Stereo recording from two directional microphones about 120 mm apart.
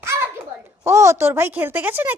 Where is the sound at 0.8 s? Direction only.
25° right (ahead or behind).